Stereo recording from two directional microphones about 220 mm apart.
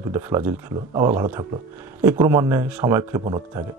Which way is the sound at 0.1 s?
10° right (ahead or behind).